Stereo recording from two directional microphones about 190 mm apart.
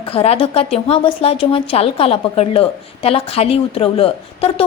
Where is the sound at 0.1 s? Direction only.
30° left (ahead or behind).